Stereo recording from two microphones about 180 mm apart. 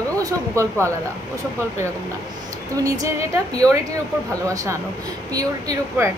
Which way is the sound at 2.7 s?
20° right (ahead or behind).